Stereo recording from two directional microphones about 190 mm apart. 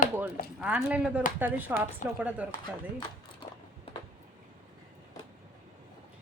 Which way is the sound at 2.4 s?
10° right (ahead or behind).